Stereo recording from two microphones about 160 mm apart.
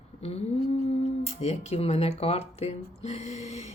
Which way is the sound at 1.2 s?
45° left (ahead or behind).